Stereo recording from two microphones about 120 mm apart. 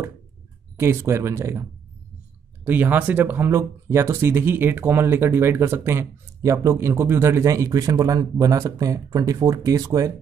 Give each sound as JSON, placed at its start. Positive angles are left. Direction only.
{"t": 0.7, "sound": "speech", "side_deg": -20}